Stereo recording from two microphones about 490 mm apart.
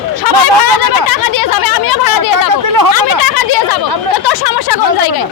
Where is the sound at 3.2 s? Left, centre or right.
Left.